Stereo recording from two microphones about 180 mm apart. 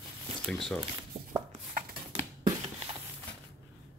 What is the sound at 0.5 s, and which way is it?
Speech, 5° left (ahead or behind).